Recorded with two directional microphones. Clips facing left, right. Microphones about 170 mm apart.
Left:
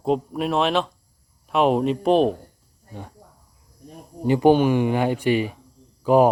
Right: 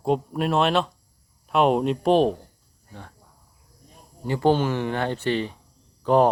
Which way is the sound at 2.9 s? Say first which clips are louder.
Left 5 dB; 15° left (ahead or behind).